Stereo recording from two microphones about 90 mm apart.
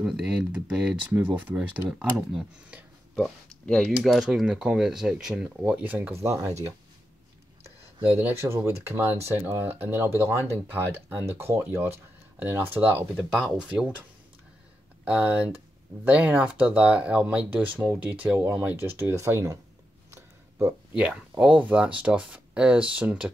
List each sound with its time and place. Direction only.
0.0 s speech: 5° right (ahead or behind)
1.9 s speech: 5° right (ahead or behind)
3.2 s speech: 5° left (ahead or behind); by 6.1 s 15° right (ahead or behind)
6.2 s speech: 35° right (ahead or behind)
8.2 s speech: 25° right (ahead or behind)
12.8 s speech: 10° right (ahead or behind)
15.0 s speech: 15° right (ahead or behind); by 19.6 s 35° right (ahead or behind)
20.1 s a sound: 30° right (ahead or behind)
20.9 s speech: 10° right (ahead or behind)